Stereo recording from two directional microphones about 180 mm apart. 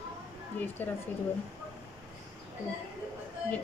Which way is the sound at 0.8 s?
10° left (ahead or behind).